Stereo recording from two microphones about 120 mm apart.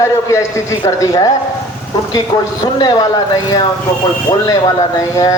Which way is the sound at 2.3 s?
35° left (ahead or behind).